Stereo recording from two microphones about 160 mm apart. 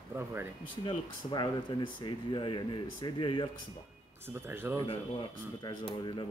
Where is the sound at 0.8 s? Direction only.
30° left (ahead or behind).